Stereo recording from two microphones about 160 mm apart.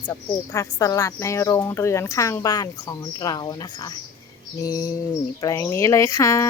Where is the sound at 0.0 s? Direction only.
15° left (ahead or behind).